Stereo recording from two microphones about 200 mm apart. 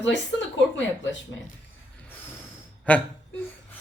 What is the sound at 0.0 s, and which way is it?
Speech, 65° left (ahead or behind).